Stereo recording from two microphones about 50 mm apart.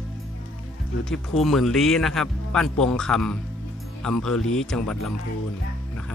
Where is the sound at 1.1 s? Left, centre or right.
Centre.